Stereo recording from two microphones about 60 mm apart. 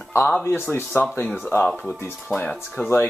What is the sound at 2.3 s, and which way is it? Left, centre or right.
Speech, centre.